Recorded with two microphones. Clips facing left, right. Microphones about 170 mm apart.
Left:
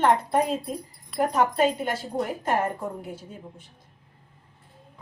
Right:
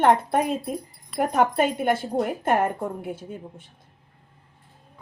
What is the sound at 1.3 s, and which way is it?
Speech, 55° right (ahead or behind).